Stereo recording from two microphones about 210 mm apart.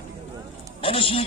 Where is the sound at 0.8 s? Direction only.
25° left (ahead or behind).